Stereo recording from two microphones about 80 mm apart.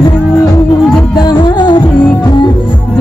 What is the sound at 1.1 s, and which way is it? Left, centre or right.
Music, left.